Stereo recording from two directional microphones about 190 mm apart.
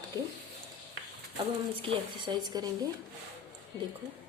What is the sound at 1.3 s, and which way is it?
A woman's voice, 30° right (ahead or behind).